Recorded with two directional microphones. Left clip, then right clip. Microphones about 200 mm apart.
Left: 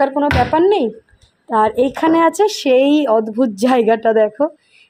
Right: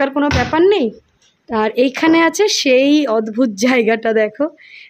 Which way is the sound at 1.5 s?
20° right (ahead or behind).